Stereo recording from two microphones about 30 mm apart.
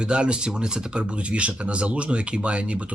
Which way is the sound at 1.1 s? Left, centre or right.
Right.